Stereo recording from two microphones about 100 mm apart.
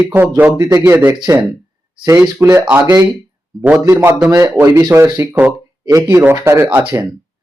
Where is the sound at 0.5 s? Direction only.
30° right (ahead or behind).